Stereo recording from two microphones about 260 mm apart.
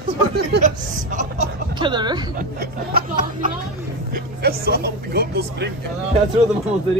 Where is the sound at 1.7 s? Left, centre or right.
Centre.